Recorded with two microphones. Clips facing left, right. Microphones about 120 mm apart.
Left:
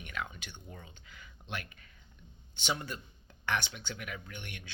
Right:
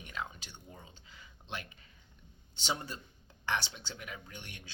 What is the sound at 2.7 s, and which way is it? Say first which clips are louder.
Speech: left 1 dB; 30° right (ahead or behind).